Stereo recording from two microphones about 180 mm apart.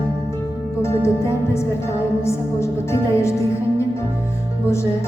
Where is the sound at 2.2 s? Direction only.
15° left (ahead or behind).